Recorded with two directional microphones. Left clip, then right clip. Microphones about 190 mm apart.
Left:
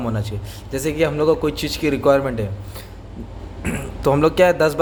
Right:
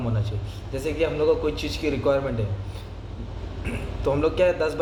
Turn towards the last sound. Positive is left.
turn(degrees=55)  # may be behind; listen again after turning